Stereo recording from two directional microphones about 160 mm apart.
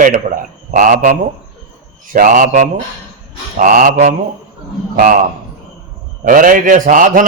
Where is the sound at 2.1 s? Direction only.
55° right (ahead or behind).